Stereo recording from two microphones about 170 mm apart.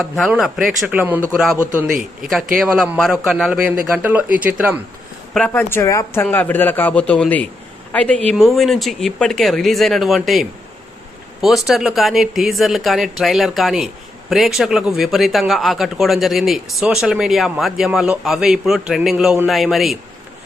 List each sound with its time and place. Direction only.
0.3 s speech: centre (ahead or behind)
2.2 s speech: centre (ahead or behind)
5.3 s a man's voice: 10° left (ahead or behind)